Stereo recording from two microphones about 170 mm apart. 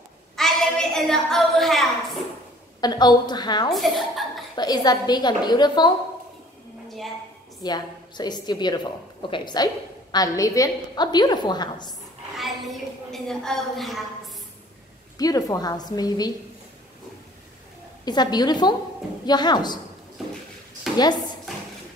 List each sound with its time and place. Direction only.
0.4 s a sound: centre (ahead or behind)
2.8 s a woman's voice: 25° left (ahead or behind)
3.7 s a woman's voice: centre (ahead or behind)
4.6 s a woman's voice: 25° left (ahead or behind)
7.6 s a woman's voice: 25° left (ahead or behind)
12.4 s a woman's voice: centre (ahead or behind)
15.1 s a woman's voice: 20° left (ahead or behind)
18.0 s a woman's voice: 25° left (ahead or behind)
20.2 s a sound: centre (ahead or behind)
21.0 s speech: 25° left (ahead or behind)